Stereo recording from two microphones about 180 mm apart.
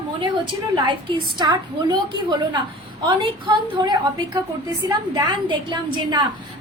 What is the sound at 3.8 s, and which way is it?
A woman's voice, 25° right (ahead or behind).